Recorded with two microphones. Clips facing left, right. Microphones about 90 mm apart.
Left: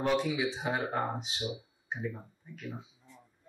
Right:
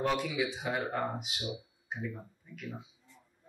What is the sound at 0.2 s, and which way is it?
Speech, 25° left (ahead or behind).